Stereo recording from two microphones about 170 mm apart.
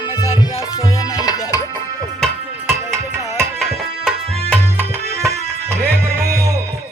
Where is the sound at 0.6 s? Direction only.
20° left (ahead or behind).